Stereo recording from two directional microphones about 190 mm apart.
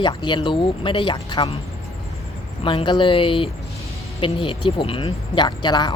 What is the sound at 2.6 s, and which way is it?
Speech, 30° left (ahead or behind).